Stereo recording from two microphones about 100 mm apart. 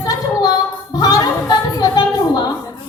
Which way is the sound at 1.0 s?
45° left (ahead or behind).